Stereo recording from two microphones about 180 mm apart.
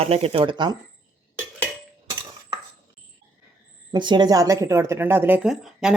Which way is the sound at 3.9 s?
25° right (ahead or behind).